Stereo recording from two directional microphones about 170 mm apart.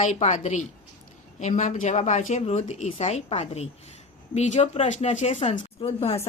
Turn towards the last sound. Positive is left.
turn(degrees=40)  # may be behind; listen again after turning